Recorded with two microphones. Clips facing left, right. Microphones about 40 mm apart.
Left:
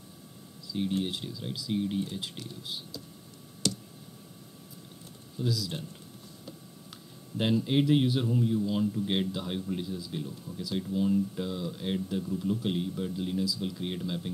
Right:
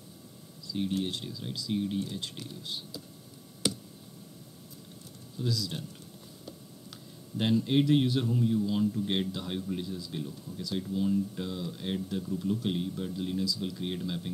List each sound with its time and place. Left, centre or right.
0.7 s a man's voice: centre
3.6 s tick: centre
5.4 s a man's voice: centre
7.3 s a man's voice: centre